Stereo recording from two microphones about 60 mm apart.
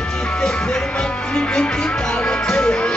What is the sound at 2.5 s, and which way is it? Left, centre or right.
Music, centre.